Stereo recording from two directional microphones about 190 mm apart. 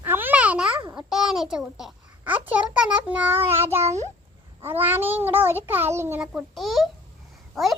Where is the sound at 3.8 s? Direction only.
35° right (ahead or behind).